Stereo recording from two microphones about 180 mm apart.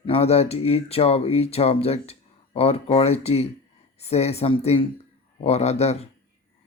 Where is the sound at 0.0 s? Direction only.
35° left (ahead or behind).